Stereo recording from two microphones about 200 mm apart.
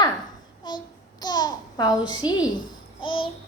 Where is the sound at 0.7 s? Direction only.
20° left (ahead or behind).